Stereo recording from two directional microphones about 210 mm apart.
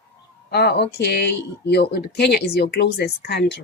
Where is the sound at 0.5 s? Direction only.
50° left (ahead or behind).